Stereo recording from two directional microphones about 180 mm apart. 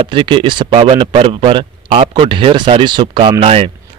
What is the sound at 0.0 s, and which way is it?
Speech, 30° right (ahead or behind).